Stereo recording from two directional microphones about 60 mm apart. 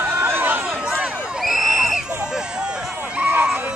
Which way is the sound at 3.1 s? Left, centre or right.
Right.